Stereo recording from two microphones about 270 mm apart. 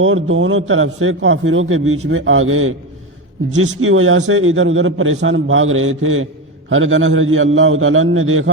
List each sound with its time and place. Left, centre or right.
0.0 s a man's voice: right